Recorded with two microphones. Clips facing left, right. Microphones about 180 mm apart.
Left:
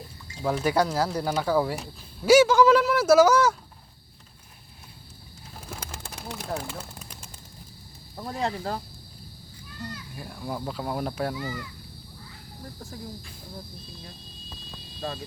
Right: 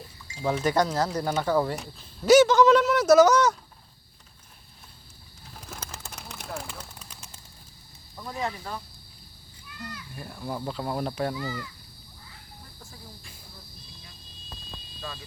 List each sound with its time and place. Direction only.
0.3 s speech: centre (ahead or behind)
5.5 s pigeon: 10° left (ahead or behind)
6.6 s a sound: 5° left (ahead or behind)
8.1 s speech: 35° left (ahead or behind)
10.2 s speech: centre (ahead or behind)
11.3 s speech: 15° left (ahead or behind)